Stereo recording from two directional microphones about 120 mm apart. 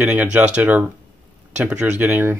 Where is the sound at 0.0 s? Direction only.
10° right (ahead or behind).